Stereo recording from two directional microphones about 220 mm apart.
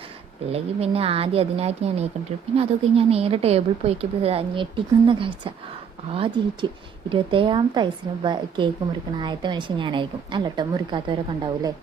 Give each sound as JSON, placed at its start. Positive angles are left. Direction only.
{"t": 0.5, "sound": "a woman's voice", "side_deg": -25}